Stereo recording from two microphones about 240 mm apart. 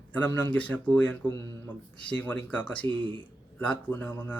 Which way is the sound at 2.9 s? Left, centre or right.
Centre.